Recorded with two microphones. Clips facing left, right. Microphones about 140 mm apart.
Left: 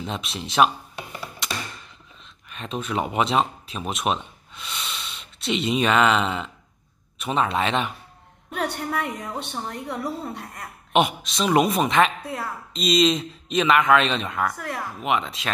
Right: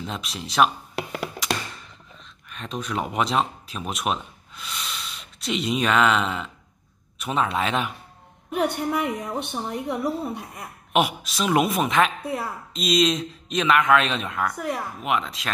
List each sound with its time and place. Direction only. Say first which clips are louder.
0.0 s speech: left 2 dB; centre (ahead or behind)
0.9 s a sound: right 6 dB; 90° right
2.5 s speech: left 2 dB; centre (ahead or behind)
8.5 s a woman's voice: right 3 dB; 10° right (ahead or behind)
12.2 s speech: right 3 dB; 15° right (ahead or behind)
12.7 s speech: left 1 dB; centre (ahead or behind)